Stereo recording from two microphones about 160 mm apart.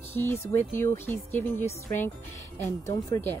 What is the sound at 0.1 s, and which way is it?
A woman's voice, 15° left (ahead or behind).